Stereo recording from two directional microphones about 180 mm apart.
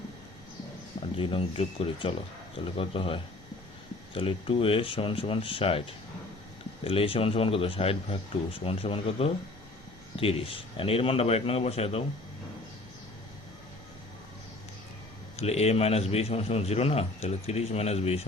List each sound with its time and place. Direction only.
1.2 s a man's voice: 30° left (ahead or behind)
6.8 s a man's voice: 30° left (ahead or behind)
15.4 s a man's voice: 35° left (ahead or behind)